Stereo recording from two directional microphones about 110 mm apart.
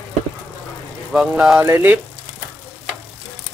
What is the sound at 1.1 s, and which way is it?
Speech, 10° right (ahead or behind).